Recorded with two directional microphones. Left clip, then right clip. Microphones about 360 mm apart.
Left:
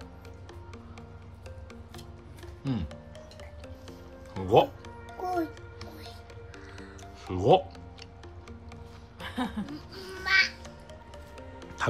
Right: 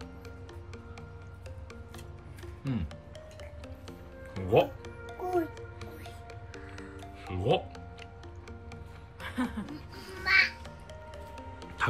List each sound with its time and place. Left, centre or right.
2.6 s music: centre
4.3 s music: centre
7.2 s music: centre
9.2 s music: left
10.2 s music: centre